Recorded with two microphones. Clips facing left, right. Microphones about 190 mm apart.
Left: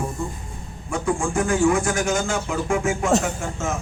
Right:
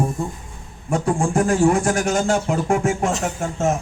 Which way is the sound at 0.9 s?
40° right (ahead or behind).